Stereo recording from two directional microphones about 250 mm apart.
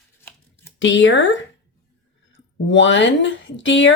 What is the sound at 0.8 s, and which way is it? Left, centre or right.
Speech, left.